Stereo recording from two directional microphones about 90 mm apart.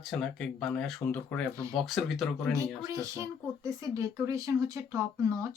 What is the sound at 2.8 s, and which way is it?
Speech, 40° right (ahead or behind).